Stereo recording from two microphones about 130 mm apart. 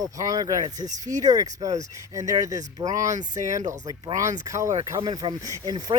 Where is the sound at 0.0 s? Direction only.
30° right (ahead or behind).